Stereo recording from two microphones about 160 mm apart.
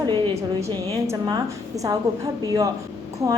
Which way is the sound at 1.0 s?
20° right (ahead or behind).